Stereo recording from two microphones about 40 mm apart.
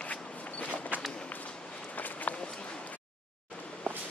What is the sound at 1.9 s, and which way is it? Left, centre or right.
Walk, left.